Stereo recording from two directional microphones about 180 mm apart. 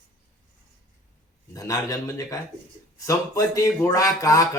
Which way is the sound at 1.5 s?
20° left (ahead or behind).